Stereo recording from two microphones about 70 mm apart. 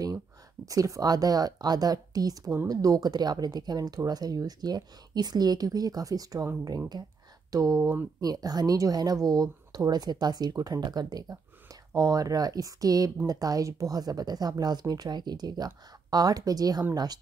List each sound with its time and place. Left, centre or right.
0.7 s a woman's voice: right
6.9 s speech: right
7.5 s a woman's voice: right
8.2 s speech: right
11.9 s a woman's voice: right
13.9 s speech: right